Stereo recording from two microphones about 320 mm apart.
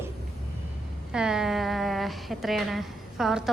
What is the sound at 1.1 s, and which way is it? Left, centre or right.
Speech, centre.